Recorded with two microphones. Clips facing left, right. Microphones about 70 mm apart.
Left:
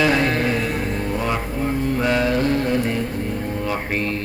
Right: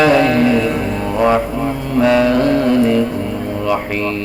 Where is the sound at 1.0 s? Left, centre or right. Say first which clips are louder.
Right 9 dB; right.